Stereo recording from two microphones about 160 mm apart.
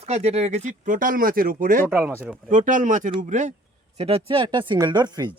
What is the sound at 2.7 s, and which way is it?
Speech, 55° right (ahead or behind).